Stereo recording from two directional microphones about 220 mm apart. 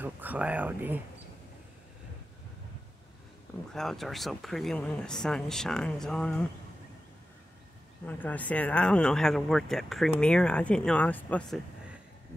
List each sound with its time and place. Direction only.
0.0 s speech: 10° right (ahead or behind)
3.7 s speech: centre (ahead or behind)
8.1 s speech: 5° left (ahead or behind)